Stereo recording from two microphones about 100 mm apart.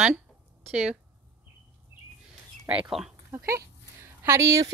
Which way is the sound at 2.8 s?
5° right (ahead or behind).